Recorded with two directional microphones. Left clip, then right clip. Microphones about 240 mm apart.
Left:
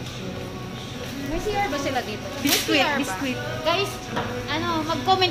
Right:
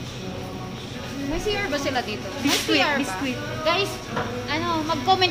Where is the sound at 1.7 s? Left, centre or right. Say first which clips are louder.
Right 1 dB; right.